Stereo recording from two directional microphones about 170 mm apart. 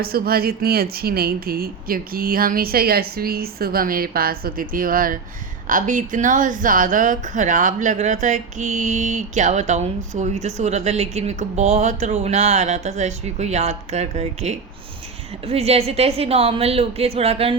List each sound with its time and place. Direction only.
0.0 s a woman's voice: 65° right (ahead or behind); by 17.6 s 35° right (ahead or behind)